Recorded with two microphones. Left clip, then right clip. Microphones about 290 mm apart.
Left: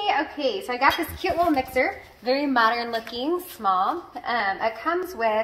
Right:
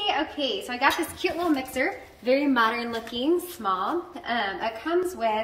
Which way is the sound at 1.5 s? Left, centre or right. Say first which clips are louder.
Left 3 dB; centre.